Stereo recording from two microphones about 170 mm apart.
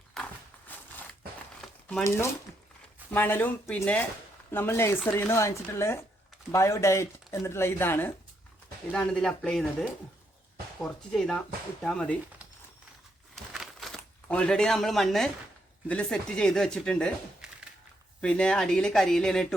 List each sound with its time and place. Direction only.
1.6 s crumpling: centre (ahead or behind)
3.1 s speech: 10° left (ahead or behind)
13.3 s a sound: centre (ahead or behind)
15.9 s speech: 5° left (ahead or behind)